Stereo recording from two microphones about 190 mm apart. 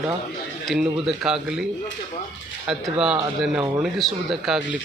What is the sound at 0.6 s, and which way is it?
Speech, centre (ahead or behind).